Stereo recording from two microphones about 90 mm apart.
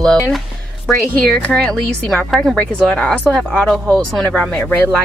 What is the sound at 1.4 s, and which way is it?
Speech, 15° left (ahead or behind).